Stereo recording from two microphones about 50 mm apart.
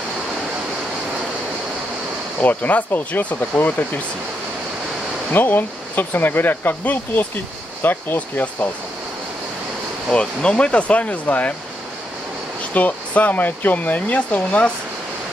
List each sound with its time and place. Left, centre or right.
2.4 s speech: left
5.3 s speech: left
10.1 s speech: left
12.7 s speech: left